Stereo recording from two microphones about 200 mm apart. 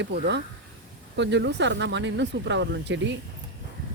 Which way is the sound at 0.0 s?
60° right (ahead or behind).